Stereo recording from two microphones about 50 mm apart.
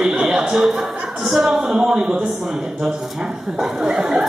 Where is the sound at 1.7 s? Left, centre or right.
Centre.